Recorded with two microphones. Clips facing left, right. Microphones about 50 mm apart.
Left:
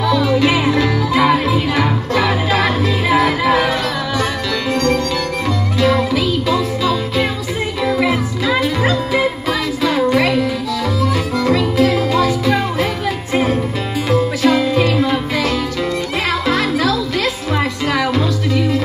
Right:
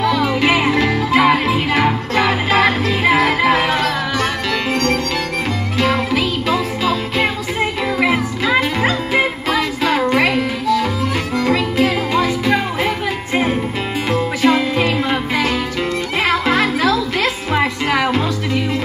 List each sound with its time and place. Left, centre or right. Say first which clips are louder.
0.0 s music: left 1 dB; right
11.4 s music: left 2 dB; right